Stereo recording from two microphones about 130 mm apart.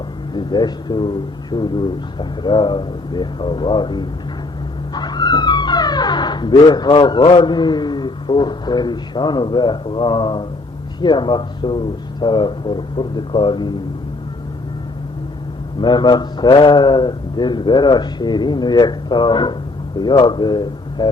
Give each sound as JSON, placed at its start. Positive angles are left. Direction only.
{"t": 0.3, "sound": "a man's voice", "side_deg": 35}
{"t": 15.8, "sound": "a man's voice", "side_deg": 35}